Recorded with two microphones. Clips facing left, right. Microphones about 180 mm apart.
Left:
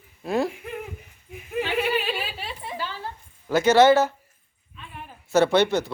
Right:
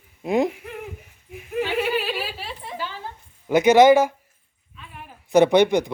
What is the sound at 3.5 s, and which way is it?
Speech, 15° right (ahead or behind).